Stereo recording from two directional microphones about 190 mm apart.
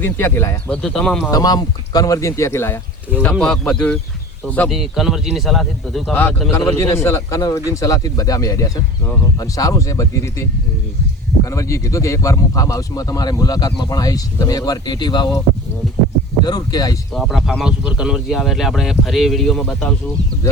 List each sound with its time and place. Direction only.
0.0 s speech: 10° left (ahead or behind)
1.3 s speech: 20° left (ahead or behind); by 6.2 s centre (ahead or behind)
6.7 s speech: 15° left (ahead or behind)
11.4 s speech: 15° left (ahead or behind)
16.4 s speech: 20° left (ahead or behind)
17.2 s speech: centre (ahead or behind)